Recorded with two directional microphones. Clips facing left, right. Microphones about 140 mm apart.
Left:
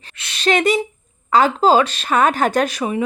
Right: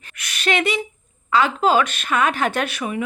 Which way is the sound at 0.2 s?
30° left (ahead or behind).